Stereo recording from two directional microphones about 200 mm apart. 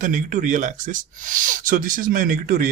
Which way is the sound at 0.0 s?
40° right (ahead or behind).